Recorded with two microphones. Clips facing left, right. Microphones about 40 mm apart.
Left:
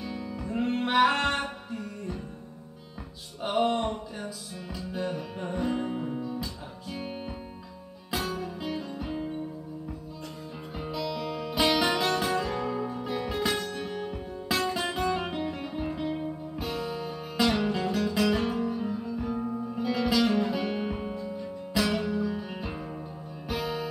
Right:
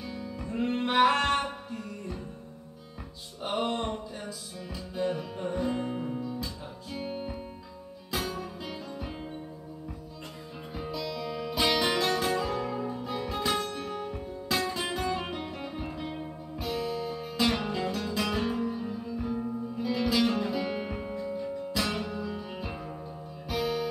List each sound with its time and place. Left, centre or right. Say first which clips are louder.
0.0 s music: left 2 dB; centre
3.4 s music: left 4 dB; centre
3.8 s music: left 2 dB; centre
10.8 s music: left 2 dB; centre
13.5 s music: even; centre
13.9 s music: left 1 dB; centre
17.4 s music: left 3 dB; centre
19.4 s music: left 2 dB; centre
20.1 s music: left 2 dB; centre
22.3 s music: left 2 dB; centre